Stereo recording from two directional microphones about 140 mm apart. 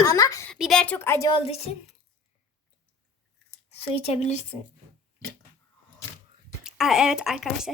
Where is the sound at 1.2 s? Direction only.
40° left (ahead or behind).